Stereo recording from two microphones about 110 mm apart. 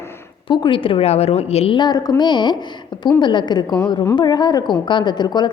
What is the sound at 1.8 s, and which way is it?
A woman's voice, 35° left (ahead or behind).